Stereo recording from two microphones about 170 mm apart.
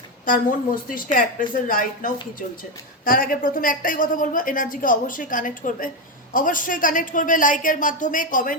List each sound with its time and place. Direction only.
0.3 s a woman's voice: 55° left (ahead or behind)